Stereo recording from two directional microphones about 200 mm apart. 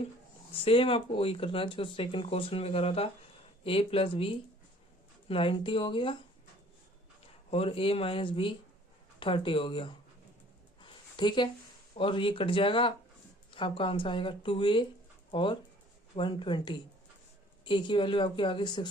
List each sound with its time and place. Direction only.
0.5 s speech: 25° left (ahead or behind)
7.5 s speech: 30° left (ahead or behind)
10.8 s a sound: 25° left (ahead or behind)
11.9 s speech: 25° left (ahead or behind)